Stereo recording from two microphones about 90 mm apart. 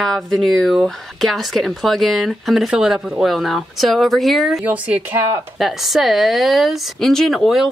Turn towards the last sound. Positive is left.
turn(degrees=0)  # may be behind; listen again after turning